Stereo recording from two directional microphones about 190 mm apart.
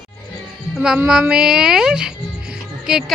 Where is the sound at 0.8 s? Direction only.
5° right (ahead or behind).